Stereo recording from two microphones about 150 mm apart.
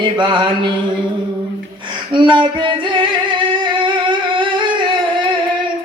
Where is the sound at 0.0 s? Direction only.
30° right (ahead or behind).